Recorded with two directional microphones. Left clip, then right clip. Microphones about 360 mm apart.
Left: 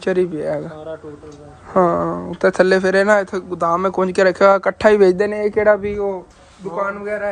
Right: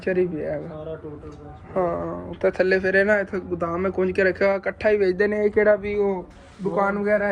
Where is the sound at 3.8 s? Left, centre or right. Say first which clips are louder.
Left 3 dB; left.